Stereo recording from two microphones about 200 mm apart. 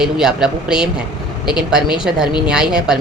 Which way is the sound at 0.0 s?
5° right (ahead or behind).